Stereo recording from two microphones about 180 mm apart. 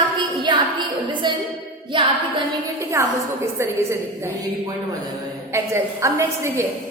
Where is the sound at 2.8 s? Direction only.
15° right (ahead or behind).